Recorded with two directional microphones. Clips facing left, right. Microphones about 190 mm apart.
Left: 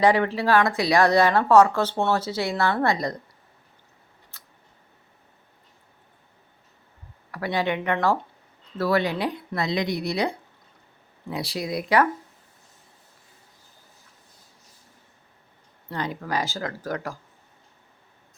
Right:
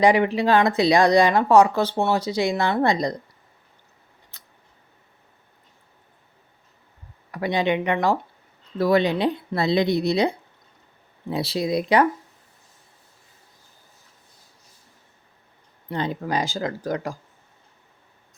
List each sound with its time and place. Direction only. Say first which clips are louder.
0.0 s speech: right 2 dB; 15° right (ahead or behind)
4.3 s scissors: left 1 dB; 20° right (ahead or behind)
7.3 s speech: right 3 dB; 20° right (ahead or behind)
15.9 s speech: right 3 dB; 20° right (ahead or behind)